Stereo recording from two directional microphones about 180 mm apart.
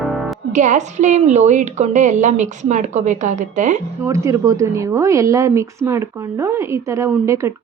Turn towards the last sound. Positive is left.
turn(degrees=-15)  # may be behind; listen again after turning